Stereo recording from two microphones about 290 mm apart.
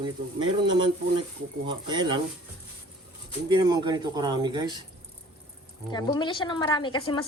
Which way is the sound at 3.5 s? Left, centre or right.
Centre.